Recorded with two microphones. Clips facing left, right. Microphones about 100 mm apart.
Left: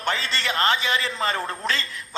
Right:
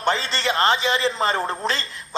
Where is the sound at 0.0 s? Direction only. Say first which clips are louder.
Right 4 dB; 25° right (ahead or behind).